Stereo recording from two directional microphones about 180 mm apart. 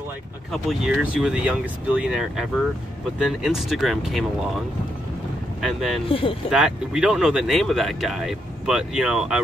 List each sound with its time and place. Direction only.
0.5 s speech: centre (ahead or behind)
5.6 s speech: centre (ahead or behind)
6.0 s speech: 30° left (ahead or behind)
6.5 s speech: 5° right (ahead or behind)